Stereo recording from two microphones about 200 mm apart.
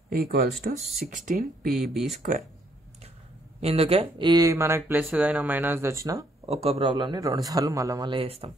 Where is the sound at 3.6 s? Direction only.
30° right (ahead or behind).